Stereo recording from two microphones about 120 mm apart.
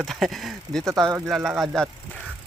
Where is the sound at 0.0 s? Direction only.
Centre (ahead or behind).